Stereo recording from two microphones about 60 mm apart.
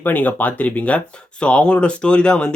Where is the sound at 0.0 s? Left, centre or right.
Left.